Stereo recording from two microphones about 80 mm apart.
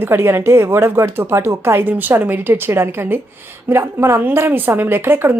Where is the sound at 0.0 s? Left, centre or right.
Right.